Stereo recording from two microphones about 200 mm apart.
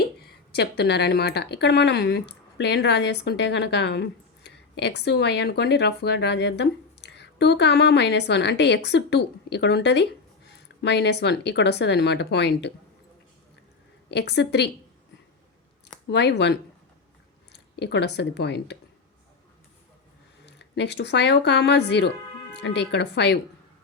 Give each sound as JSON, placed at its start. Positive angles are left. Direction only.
{"t": 0.5, "sound": "speech", "side_deg": 55}
{"t": 14.1, "sound": "speech", "side_deg": 60}
{"t": 16.0, "sound": "speech", "side_deg": 55}
{"t": 20.4, "sound": "speech", "side_deg": 60}